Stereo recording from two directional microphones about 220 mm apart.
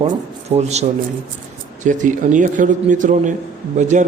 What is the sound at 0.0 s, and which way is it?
A man's voice, 30° right (ahead or behind).